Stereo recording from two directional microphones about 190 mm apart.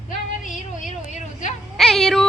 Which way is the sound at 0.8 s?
40° left (ahead or behind).